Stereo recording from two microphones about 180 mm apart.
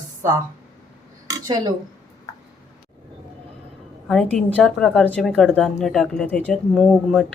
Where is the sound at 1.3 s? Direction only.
20° right (ahead or behind).